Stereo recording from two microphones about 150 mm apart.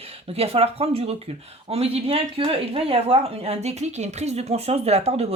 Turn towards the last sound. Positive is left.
turn(degrees=-45)  # may be behind; listen again after turning